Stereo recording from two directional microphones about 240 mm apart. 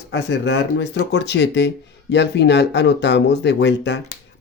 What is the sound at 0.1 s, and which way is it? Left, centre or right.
Speech, left.